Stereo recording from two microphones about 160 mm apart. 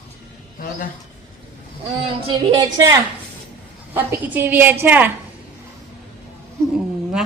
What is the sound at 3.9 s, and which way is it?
A woman's voice, 10° right (ahead or behind).